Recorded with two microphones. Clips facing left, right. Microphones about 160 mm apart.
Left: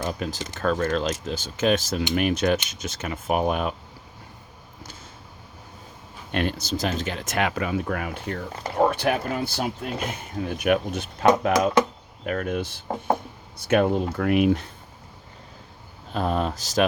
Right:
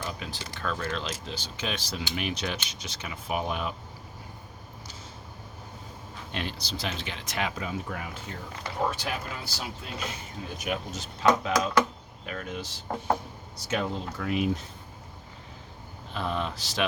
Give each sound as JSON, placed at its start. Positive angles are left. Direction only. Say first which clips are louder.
{"t": 0.0, "sound": "speech", "louder": "left 8 dB", "side_deg": 45}
{"t": 6.3, "sound": "speech", "louder": "left 9 dB", "side_deg": 55}
{"t": 16.1, "sound": "speech", "louder": "left 6 dB", "side_deg": 45}